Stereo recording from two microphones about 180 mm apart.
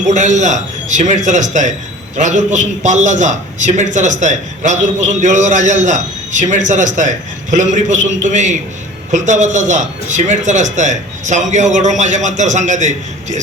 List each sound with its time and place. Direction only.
0.0 s a man's voice: 40° right (ahead or behind)